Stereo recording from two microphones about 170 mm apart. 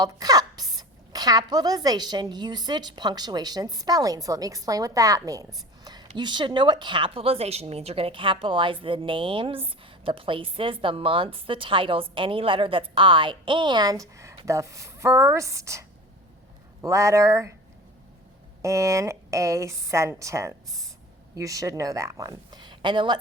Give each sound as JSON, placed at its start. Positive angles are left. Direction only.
{"t": 0.0, "sound": "a woman's voice", "side_deg": -20}
{"t": 5.8, "sound": "a sound", "side_deg": -25}
{"t": 6.1, "sound": "a woman's voice", "side_deg": -25}
{"t": 18.6, "sound": "a woman's voice", "side_deg": -15}